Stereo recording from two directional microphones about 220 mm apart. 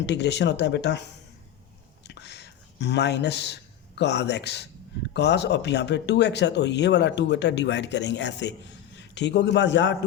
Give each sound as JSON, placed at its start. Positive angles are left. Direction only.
{"t": 0.0, "sound": "speech", "side_deg": 50}
{"t": 2.0, "sound": "a sound", "side_deg": 50}
{"t": 5.1, "sound": "speech", "side_deg": 50}